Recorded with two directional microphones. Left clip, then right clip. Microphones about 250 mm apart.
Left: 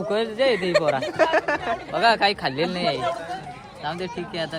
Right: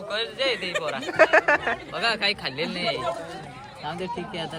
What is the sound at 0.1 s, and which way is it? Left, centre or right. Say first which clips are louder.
Speech: left 4 dB; left.